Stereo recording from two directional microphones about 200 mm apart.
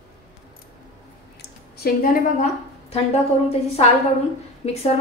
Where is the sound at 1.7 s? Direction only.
50° left (ahead or behind).